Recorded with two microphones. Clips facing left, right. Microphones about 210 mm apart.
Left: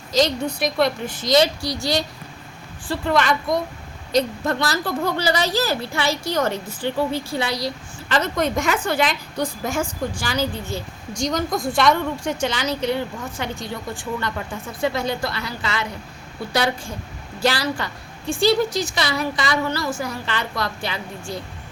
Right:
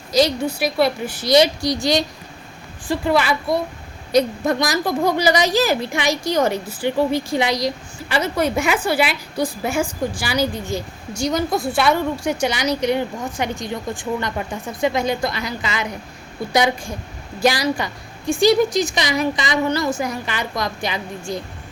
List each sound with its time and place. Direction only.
0.1 s a woman's voice: 10° right (ahead or behind)